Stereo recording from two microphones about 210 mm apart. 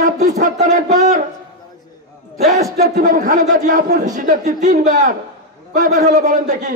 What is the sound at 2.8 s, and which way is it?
A man's voice, 35° right (ahead or behind).